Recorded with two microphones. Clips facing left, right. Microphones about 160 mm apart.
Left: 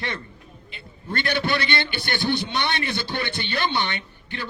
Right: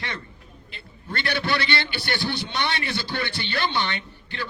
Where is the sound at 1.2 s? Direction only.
15° left (ahead or behind).